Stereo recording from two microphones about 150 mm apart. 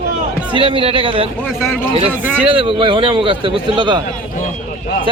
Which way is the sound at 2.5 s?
35° right (ahead or behind).